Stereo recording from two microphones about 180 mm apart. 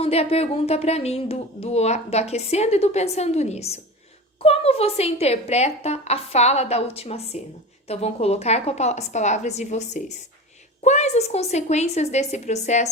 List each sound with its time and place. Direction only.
0.0 s speech: 35° left (ahead or behind)